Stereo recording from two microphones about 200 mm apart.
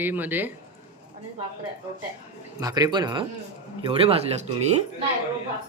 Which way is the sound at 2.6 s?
20° right (ahead or behind).